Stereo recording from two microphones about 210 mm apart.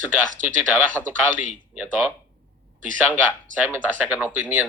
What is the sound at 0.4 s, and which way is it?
Speech, 35° right (ahead or behind).